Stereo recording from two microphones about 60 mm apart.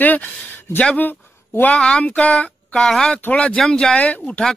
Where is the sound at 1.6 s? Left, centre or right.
Centre.